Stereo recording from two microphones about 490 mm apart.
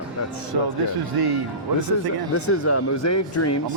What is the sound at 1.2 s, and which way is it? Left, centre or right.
Speech, right.